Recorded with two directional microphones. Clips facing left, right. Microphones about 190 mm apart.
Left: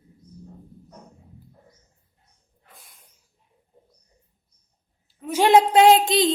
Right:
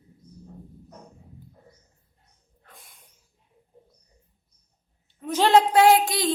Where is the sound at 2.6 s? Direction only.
Centre (ahead or behind).